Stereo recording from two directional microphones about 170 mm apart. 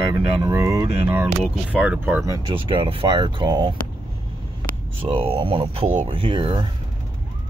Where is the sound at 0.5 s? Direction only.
15° right (ahead or behind).